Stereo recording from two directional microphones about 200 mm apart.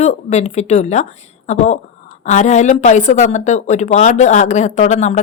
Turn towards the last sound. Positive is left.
turn(degrees=35)  # may be behind; listen again after turning